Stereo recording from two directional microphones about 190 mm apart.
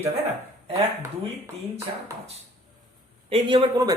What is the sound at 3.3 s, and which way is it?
Speech, 25° right (ahead or behind).